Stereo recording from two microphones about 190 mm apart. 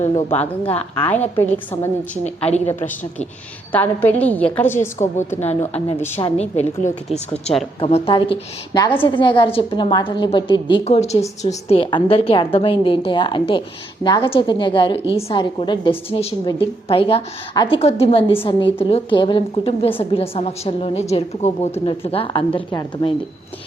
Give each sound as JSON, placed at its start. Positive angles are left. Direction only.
{"t": 0.0, "sound": "a woman's voice", "side_deg": 10}
{"t": 2.2, "sound": "a woman's voice", "side_deg": 35}
{"t": 2.6, "sound": "a woman's voice", "side_deg": 10}
{"t": 5.4, "sound": "a woman's voice", "side_deg": 35}
{"t": 6.0, "sound": "a woman's voice", "side_deg": 10}
{"t": 6.2, "sound": "a woman's voice", "side_deg": 35}